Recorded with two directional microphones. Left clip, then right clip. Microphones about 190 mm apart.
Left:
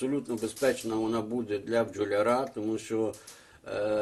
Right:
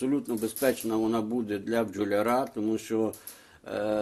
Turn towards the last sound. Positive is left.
turn(degrees=-35)  # may be behind; listen again after turning